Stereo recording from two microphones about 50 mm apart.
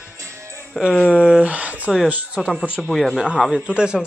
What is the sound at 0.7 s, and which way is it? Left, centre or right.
Speech, centre.